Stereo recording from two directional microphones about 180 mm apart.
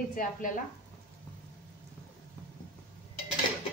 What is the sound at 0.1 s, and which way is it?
Speech, 50° left (ahead or behind).